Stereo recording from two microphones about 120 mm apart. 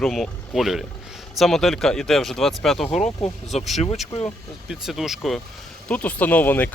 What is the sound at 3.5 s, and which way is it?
Speech, 65° left (ahead or behind).